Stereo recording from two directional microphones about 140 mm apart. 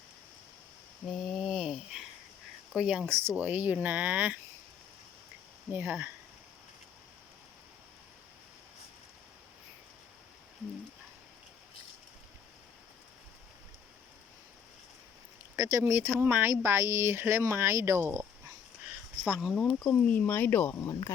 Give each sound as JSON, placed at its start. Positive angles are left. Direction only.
{"t": 1.0, "sound": "a sound", "side_deg": 0}
{"t": 2.7, "sound": "speech", "side_deg": -5}
{"t": 5.7, "sound": "speech", "side_deg": -15}
{"t": 15.5, "sound": "speech", "side_deg": -25}
{"t": 19.2, "sound": "speech", "side_deg": -5}
{"t": 19.5, "sound": "speech", "side_deg": 5}